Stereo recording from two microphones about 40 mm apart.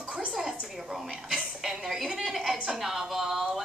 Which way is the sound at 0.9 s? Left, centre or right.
Centre.